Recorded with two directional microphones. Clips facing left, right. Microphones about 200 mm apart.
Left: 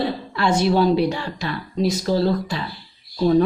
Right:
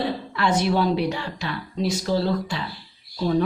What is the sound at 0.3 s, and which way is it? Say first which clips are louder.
Speech: left 4 dB; 30° left (ahead or behind).